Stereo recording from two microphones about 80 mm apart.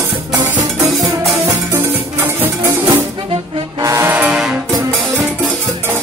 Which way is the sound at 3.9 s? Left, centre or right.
Right.